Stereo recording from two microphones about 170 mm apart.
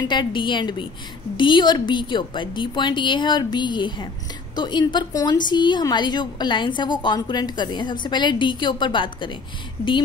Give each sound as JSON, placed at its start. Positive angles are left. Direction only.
{"t": 0.1, "sound": "a woman's voice", "side_deg": 25}